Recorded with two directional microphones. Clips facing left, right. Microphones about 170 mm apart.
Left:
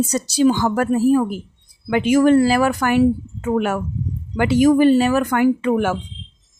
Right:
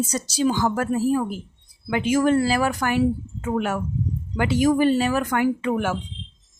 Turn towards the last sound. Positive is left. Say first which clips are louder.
# left 5 dB
turn(degrees=65)  # may be behind; listen again after turning